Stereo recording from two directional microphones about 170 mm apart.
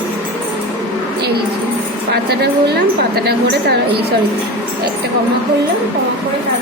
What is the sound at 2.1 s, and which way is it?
Speech, 70° right (ahead or behind).